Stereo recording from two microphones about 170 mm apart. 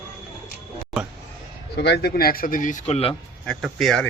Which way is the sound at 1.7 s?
80° left.